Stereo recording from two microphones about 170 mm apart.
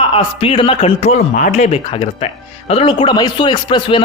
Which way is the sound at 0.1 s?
30° left (ahead or behind).